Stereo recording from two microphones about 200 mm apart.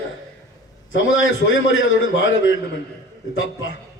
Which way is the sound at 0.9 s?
75° left (ahead or behind).